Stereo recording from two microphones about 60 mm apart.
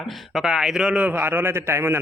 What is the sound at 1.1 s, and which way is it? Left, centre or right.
Speech, right.